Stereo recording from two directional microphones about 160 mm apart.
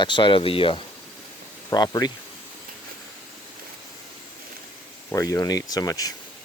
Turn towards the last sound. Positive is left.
turn(degrees=25)  # may be behind; listen again after turning